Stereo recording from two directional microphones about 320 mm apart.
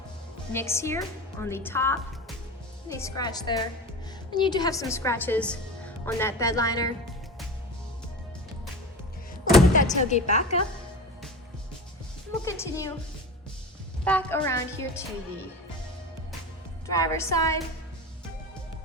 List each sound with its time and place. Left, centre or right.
0.5 s a woman's voice: centre
9.7 s a woman's voice: left
12.3 s a woman's voice: centre
14.0 s a woman's voice: centre
16.9 s a woman's voice: centre